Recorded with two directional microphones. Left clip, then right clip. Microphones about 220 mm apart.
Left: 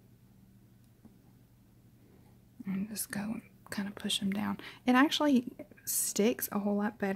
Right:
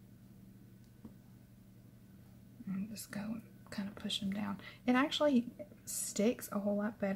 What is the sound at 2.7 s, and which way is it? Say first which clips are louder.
Speech: left 6 dB; 45° left (ahead or behind).